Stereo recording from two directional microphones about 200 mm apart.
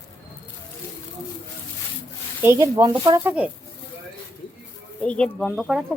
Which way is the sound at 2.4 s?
15° right (ahead or behind).